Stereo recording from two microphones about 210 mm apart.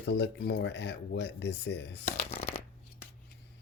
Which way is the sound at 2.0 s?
30° left (ahead or behind).